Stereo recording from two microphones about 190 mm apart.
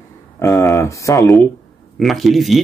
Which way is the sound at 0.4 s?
15° left (ahead or behind).